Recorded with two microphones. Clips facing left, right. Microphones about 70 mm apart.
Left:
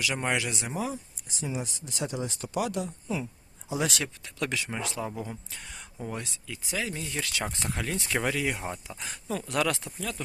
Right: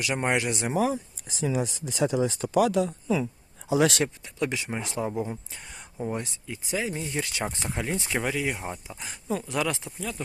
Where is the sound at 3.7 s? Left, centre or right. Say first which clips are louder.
Right 8 dB; right.